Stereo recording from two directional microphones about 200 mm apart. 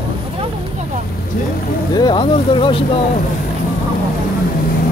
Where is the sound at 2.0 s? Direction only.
20° left (ahead or behind).